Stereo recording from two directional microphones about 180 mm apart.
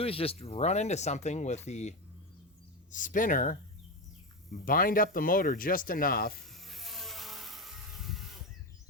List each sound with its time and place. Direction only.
0.0 s speech: 30° left (ahead or behind); by 3.6 s 50° left (ahead or behind)
4.6 s speech: 50° left (ahead or behind)
6.4 s a sound: centre (ahead or behind)